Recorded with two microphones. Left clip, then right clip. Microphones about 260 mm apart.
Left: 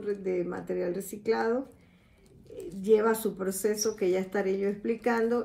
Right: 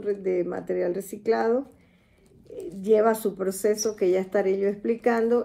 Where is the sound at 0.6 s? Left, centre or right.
Centre.